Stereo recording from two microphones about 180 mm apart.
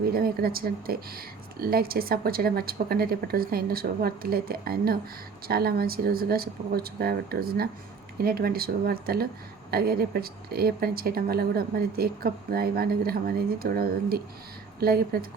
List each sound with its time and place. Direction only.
0.0 s speech: 55° right (ahead or behind)